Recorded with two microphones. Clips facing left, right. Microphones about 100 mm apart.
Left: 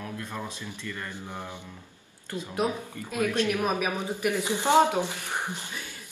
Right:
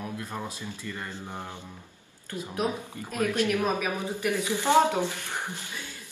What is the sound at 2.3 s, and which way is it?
Speech, 15° left (ahead or behind).